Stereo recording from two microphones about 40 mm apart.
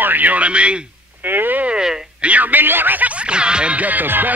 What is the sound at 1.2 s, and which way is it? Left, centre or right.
Speech, right.